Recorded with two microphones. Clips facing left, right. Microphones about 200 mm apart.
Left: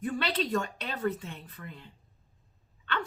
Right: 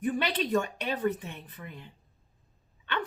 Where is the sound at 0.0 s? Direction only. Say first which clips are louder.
Right 2 dB; 15° right (ahead or behind).